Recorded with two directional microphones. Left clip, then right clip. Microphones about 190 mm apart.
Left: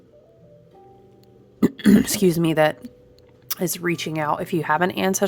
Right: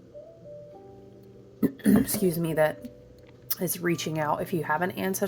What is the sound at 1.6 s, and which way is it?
Speech, 40° left (ahead or behind).